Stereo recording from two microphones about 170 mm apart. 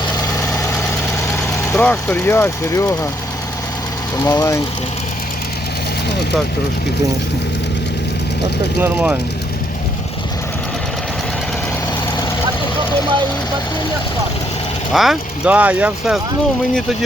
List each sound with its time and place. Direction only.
1.7 s speech: 5° left (ahead or behind)
4.2 s speech: 15° left (ahead or behind)
8.8 s speech: 10° right (ahead or behind)
14.9 s speech: centre (ahead or behind)